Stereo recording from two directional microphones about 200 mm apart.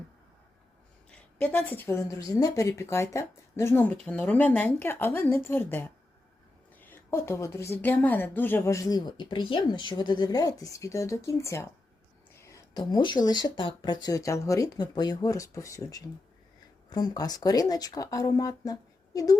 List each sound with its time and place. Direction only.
1.4 s speech: 5° left (ahead or behind)